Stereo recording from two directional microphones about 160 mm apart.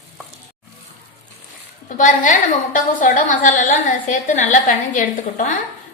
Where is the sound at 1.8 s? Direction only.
55° left (ahead or behind).